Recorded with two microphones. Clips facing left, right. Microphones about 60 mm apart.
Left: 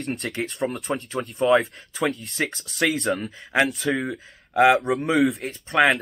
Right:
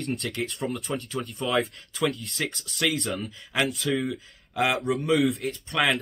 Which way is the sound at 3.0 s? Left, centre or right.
Left.